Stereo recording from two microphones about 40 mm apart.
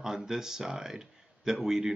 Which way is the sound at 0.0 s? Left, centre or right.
Centre.